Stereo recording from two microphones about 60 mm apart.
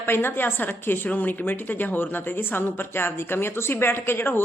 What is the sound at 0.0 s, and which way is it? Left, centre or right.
A woman's voice, left.